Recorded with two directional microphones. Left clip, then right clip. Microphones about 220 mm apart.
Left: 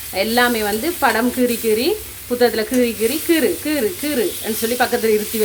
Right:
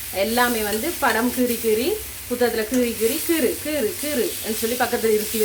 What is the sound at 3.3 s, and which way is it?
Sizzle, 25° left (ahead or behind).